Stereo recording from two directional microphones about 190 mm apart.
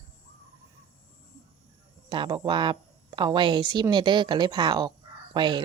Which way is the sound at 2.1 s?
25° right (ahead or behind).